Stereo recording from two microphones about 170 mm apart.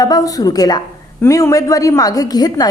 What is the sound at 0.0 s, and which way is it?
A woman's voice, 20° left (ahead or behind).